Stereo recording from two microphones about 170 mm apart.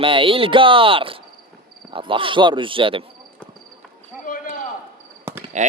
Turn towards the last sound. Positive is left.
turn(degrees=-45)  # may be behind; listen again after turning